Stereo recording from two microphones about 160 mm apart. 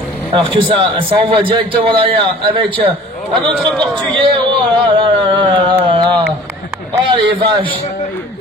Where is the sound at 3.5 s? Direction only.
Centre (ahead or behind).